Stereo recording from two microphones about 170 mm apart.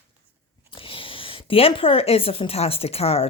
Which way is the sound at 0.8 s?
30° left (ahead or behind).